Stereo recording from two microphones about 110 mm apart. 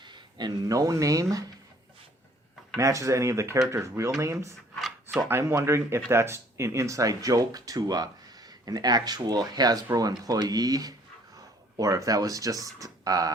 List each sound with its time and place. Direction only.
0.0 s speech: 40° right (ahead or behind)
2.7 s speech: 30° right (ahead or behind)